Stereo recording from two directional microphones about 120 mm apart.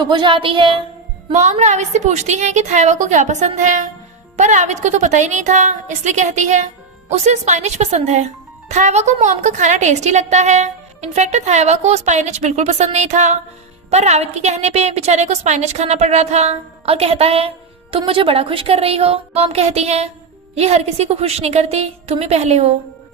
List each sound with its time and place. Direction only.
0.0 s speech: 40° right (ahead or behind)
1.3 s a woman's voice: 70° right (ahead or behind); by 6.7 s 90° right
7.1 s speech: 75° right (ahead or behind)
13.9 s a woman's voice: 65° right (ahead or behind)